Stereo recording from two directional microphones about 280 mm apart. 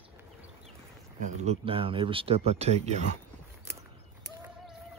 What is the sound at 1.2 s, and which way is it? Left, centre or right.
Speech, right.